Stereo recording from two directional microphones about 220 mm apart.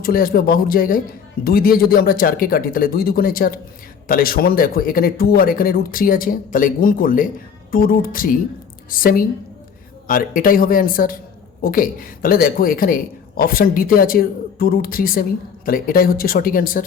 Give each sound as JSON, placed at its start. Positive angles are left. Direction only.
{"t": 0.0, "sound": "speech", "side_deg": 40}